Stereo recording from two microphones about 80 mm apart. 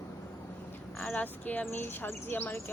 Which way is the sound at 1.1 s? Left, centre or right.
Left.